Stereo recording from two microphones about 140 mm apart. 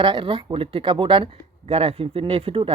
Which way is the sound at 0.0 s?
35° right (ahead or behind).